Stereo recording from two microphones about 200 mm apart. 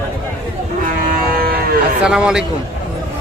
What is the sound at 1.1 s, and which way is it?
Cattle, 45° right (ahead or behind).